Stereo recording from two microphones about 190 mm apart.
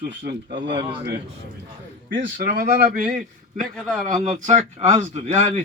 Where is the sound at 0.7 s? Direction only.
25° right (ahead or behind).